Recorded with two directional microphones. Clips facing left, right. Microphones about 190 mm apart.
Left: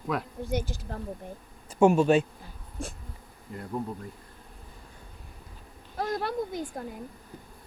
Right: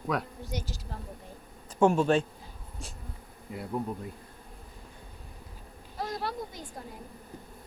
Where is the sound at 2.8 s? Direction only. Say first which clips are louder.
Left 9 dB; 50° left (ahead or behind).